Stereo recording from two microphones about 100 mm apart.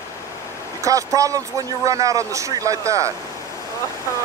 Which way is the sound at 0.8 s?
35° right (ahead or behind).